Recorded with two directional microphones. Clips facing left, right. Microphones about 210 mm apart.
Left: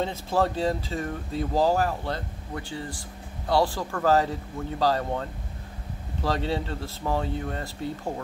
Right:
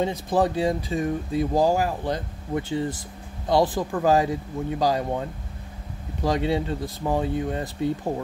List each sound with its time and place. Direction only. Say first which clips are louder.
0.0 s speech: right 3 dB; 15° right (ahead or behind)